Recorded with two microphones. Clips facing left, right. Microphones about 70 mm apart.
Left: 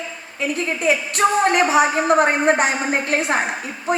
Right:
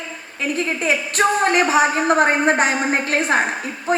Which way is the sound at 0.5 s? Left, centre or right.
Right.